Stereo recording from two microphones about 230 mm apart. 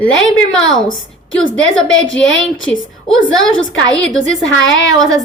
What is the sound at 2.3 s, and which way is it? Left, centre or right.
Speech, left.